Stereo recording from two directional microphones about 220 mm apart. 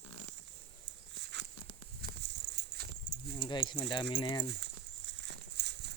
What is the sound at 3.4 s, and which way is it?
Speech, 20° left (ahead or behind).